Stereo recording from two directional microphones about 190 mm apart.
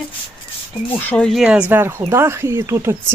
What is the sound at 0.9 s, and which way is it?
Speech, 5° left (ahead or behind).